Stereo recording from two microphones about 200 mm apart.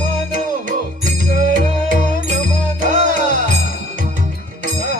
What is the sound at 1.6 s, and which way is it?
Music, 40° right (ahead or behind).